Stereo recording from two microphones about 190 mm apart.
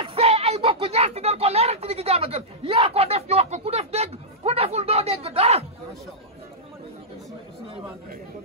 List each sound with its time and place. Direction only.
0.0 s speech: 30° right (ahead or behind)